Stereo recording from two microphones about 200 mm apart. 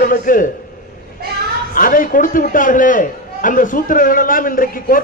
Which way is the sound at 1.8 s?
45° left (ahead or behind).